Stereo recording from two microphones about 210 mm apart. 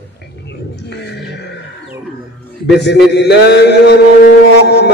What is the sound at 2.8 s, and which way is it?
Mantra, 55° left (ahead or behind).